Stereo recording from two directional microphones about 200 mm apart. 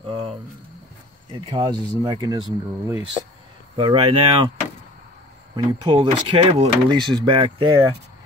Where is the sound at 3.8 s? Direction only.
25° right (ahead or behind).